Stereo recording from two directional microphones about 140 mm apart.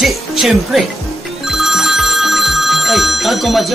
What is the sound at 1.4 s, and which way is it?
Telephone bell ringing, 5° right (ahead or behind).